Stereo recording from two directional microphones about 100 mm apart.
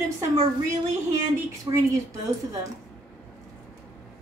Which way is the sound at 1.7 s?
40° right (ahead or behind).